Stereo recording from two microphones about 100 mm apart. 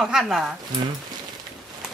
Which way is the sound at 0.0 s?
5° right (ahead or behind).